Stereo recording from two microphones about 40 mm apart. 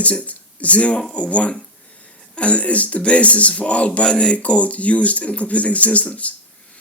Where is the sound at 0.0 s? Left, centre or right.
Left.